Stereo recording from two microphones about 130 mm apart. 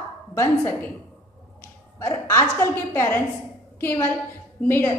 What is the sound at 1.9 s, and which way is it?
A woman's voice, 20° left (ahead or behind).